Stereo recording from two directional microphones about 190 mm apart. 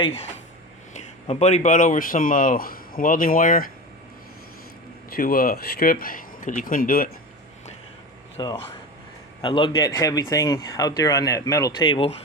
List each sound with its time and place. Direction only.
0.9 s speech: 35° left (ahead or behind)
5.1 s speech: 50° left (ahead or behind)
8.4 s speech: 20° left (ahead or behind)